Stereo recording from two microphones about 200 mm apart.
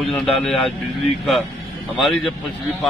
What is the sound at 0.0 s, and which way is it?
Speech, centre (ahead or behind).